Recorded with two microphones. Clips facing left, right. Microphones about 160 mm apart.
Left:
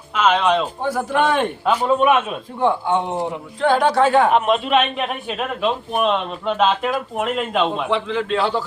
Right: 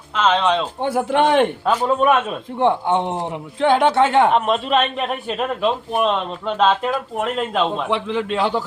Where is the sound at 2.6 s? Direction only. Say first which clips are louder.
Right 1 dB; 20° right (ahead or behind).